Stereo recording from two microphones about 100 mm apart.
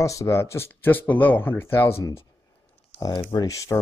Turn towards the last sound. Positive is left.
turn(degrees=35)  # may be behind; listen again after turning